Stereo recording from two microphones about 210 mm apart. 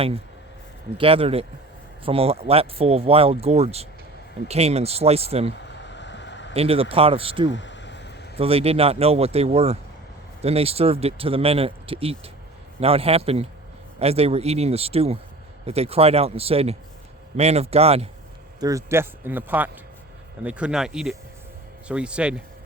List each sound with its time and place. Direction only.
0.9 s speech: 25° right (ahead or behind)
5.5 s a sound: 55° left (ahead or behind)
6.5 s speech: 25° right (ahead or behind)
7.5 s a sound: 60° left (ahead or behind)
8.4 s speech: 25° right (ahead or behind)
18.6 s speech: 15° right (ahead or behind)